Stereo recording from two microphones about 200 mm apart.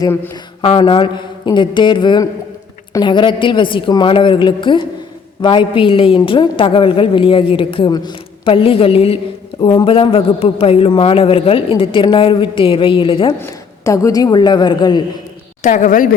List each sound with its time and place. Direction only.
0.6 s a woman's voice: 25° left (ahead or behind)
13.4 s a woman's voice: 15° left (ahead or behind)
15.6 s a woman's voice: 40° left (ahead or behind)